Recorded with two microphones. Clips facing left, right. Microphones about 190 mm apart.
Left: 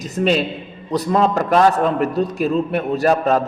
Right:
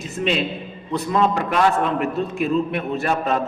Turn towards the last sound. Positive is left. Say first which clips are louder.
# left 5 dB
turn(degrees=40)  # may be behind; listen again after turning